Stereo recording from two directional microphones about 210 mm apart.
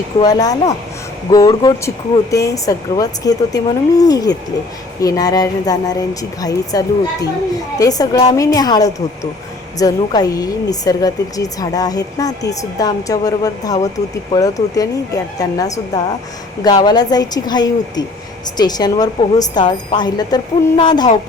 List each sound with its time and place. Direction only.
0.2 s a woman's voice: 15° left (ahead or behind)